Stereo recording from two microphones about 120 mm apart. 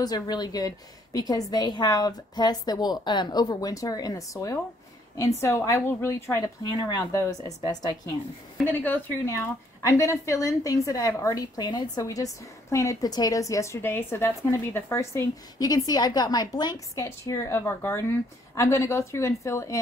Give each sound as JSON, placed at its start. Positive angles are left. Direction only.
{"t": 0.0, "sound": "a woman's voice", "side_deg": 35}
{"t": 6.6, "sound": "a woman's voice", "side_deg": 35}
{"t": 8.6, "sound": "a woman's voice", "side_deg": 15}
{"t": 9.2, "sound": "a woman's voice", "side_deg": 25}
{"t": 17.0, "sound": "a woman's voice", "side_deg": 25}